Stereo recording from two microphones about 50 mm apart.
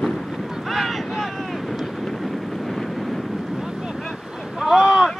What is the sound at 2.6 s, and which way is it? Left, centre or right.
Vehicle, centre.